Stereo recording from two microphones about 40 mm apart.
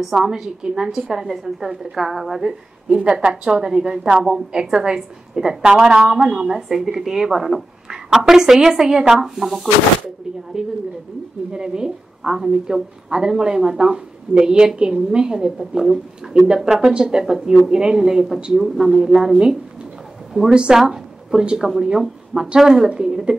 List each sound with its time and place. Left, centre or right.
0.2 s a woman's voice: centre
2.9 s a woman's voice: centre
10.6 s a woman's voice: centre
20.4 s a woman's voice: right
20.7 s a woman's voice: centre